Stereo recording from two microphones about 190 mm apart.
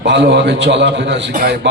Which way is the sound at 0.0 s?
70° right (ahead or behind).